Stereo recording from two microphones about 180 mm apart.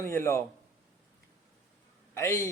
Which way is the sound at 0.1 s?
15° left (ahead or behind).